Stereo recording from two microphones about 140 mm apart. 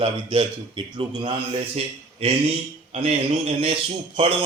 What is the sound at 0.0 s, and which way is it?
Speech, 40° right (ahead or behind).